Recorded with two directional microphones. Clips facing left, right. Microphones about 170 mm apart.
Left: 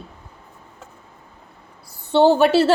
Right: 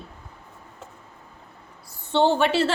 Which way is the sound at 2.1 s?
35° left (ahead or behind).